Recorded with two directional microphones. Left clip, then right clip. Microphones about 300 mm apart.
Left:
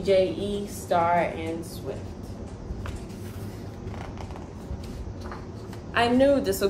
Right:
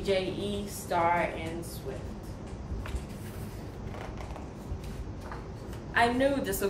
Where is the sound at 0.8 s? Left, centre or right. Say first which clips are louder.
Left 5 dB; centre.